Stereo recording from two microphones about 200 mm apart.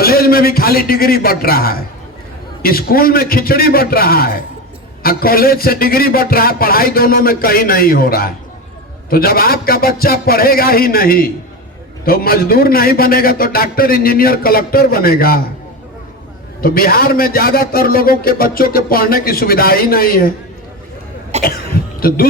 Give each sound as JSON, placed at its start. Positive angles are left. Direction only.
{"t": 0.0, "sound": "a man's voice", "side_deg": 50}
{"t": 16.6, "sound": "a man's voice", "side_deg": 50}
{"t": 21.3, "sound": "cough", "side_deg": -35}
{"t": 22.0, "sound": "a man's voice", "side_deg": 50}